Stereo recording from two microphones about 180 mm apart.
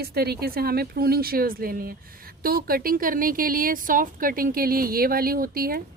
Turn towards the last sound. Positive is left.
turn(degrees=-55)  # may be behind; listen again after turning